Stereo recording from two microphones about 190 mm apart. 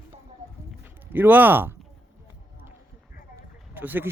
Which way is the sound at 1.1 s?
10° right (ahead or behind).